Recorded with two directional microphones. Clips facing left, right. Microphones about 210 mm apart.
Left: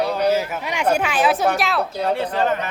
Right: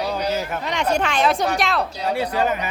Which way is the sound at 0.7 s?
10° left (ahead or behind).